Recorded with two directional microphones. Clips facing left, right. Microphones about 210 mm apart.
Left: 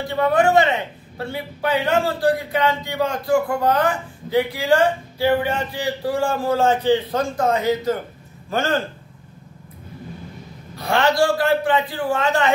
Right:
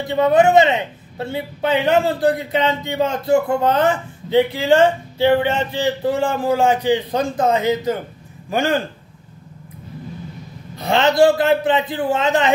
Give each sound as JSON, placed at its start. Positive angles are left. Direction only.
{"t": 0.1, "sound": "a man's voice", "side_deg": -20}
{"t": 10.8, "sound": "speech", "side_deg": -20}